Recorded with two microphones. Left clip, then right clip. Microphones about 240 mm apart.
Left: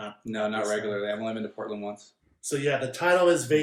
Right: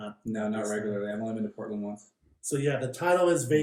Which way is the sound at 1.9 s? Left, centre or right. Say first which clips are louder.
Left 2 dB; centre.